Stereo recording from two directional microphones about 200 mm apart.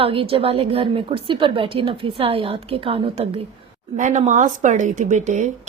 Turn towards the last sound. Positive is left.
turn(degrees=-35)  # may be behind; listen again after turning